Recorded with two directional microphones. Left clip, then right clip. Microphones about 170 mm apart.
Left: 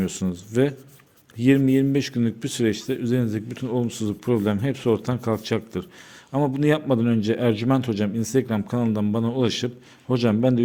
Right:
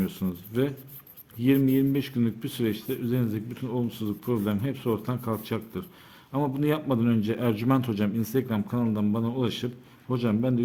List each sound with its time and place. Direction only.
0.0 s speech: 30° left (ahead or behind)